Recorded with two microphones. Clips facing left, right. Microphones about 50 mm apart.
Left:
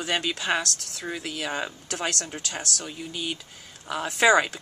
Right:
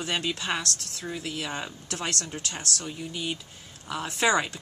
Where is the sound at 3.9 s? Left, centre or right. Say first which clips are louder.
Left 5 dB; left.